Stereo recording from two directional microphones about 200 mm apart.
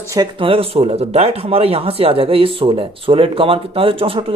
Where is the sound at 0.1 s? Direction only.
25° right (ahead or behind).